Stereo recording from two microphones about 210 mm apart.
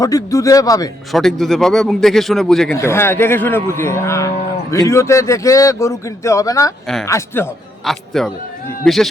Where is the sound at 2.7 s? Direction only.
10° left (ahead or behind).